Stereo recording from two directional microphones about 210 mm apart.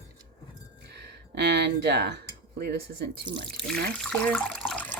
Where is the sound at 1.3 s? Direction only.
50° right (ahead or behind).